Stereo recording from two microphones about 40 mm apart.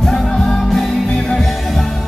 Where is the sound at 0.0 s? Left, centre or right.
Centre.